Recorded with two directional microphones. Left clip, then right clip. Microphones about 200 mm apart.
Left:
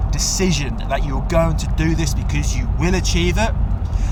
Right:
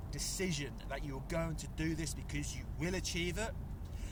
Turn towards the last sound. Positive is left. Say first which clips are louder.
# left 18 dB
turn(degrees=-40)  # may be behind; listen again after turning